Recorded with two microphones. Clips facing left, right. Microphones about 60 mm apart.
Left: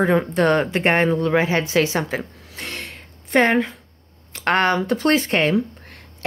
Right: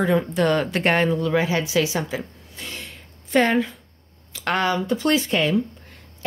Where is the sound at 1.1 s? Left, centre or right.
Left.